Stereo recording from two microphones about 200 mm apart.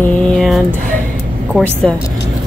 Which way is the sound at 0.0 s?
5° left (ahead or behind).